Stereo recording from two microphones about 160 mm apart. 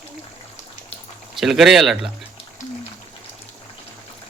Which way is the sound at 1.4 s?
Centre (ahead or behind).